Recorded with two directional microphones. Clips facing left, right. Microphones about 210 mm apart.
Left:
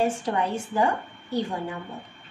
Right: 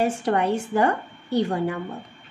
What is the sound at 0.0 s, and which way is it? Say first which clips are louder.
A woman's voice: right 3 dB; 65° right (ahead or behind).